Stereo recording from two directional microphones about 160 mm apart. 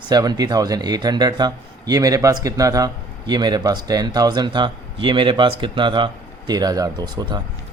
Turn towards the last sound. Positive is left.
turn(degrees=-25)  # may be behind; listen again after turning